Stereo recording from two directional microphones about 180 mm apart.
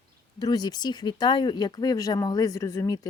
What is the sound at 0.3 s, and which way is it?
Speech, 20° left (ahead or behind).